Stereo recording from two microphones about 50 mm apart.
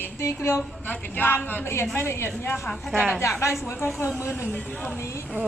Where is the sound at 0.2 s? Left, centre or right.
Left.